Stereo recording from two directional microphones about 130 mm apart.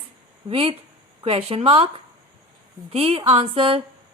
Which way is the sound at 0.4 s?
45° right (ahead or behind).